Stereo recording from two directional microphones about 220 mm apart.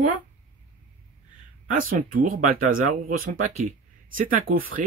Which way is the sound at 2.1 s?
40° right (ahead or behind).